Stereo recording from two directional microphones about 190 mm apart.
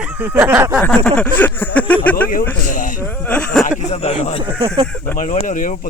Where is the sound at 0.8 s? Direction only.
5° left (ahead or behind).